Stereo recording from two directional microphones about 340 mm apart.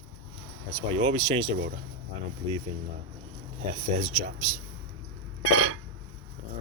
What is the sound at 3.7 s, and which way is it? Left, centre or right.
Speech, centre.